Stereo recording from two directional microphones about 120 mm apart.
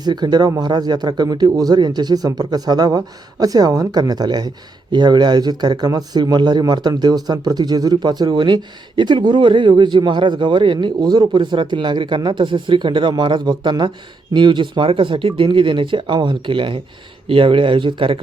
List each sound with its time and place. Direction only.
0.0 s speech: 35° right (ahead or behind)